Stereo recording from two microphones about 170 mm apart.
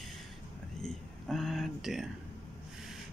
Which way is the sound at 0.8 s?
Centre (ahead or behind).